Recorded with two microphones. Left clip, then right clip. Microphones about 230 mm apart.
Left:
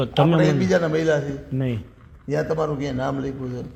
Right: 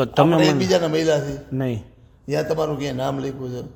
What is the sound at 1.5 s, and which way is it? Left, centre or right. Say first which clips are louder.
Speech: right 2 dB; right.